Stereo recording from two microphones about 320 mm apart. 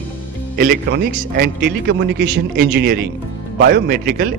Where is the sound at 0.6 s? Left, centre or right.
Right.